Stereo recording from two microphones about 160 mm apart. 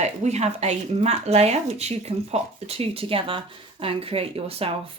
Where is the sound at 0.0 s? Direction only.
45° right (ahead or behind).